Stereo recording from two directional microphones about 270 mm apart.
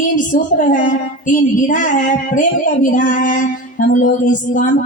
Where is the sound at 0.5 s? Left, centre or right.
Left.